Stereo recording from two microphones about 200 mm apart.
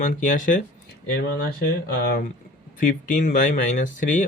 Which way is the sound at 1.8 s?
50° left (ahead or behind).